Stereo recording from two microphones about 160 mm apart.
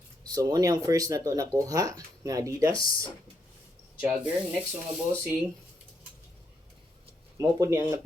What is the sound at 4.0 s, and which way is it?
Speech, 10° right (ahead or behind).